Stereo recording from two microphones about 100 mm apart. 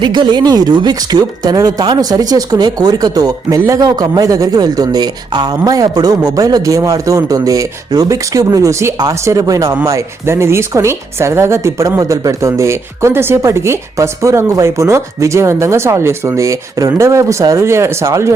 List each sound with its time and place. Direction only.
0.0 s a woman's voice: 50° right (ahead or behind); by 18.3 s 30° right (ahead or behind)